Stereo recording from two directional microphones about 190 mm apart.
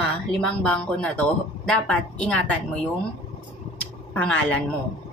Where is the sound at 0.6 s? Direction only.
5° left (ahead or behind).